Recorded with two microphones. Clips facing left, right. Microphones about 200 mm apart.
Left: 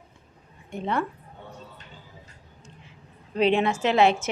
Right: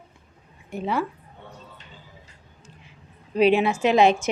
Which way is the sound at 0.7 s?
5° right (ahead or behind).